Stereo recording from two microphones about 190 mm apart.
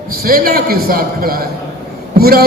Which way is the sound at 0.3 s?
50° right (ahead or behind).